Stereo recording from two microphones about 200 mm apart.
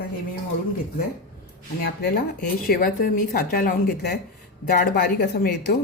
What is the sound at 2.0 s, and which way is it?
Speech, 45° left (ahead or behind).